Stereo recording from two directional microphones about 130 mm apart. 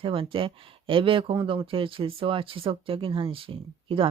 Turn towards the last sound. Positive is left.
turn(degrees=-45)  # may be behind; listen again after turning